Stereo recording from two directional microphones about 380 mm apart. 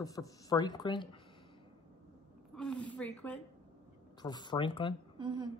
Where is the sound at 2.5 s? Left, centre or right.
Centre.